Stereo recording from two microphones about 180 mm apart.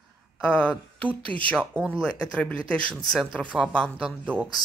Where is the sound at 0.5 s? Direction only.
5° left (ahead or behind).